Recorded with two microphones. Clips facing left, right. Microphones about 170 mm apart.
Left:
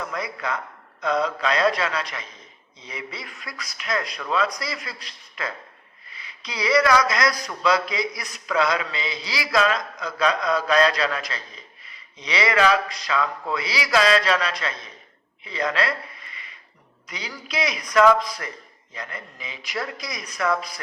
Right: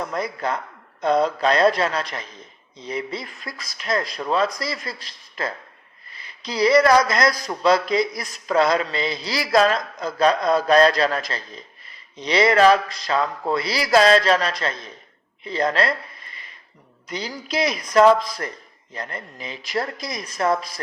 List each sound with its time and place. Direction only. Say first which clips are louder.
0.0 s a man's voice: right 4 dB; 40° right (ahead or behind)
6.1 s speech: right 6 dB; 40° right (ahead or behind)
7.4 s mantra: right 4 dB; 45° right (ahead or behind)
12.1 s a man's voice: right 5 dB; 40° right (ahead or behind)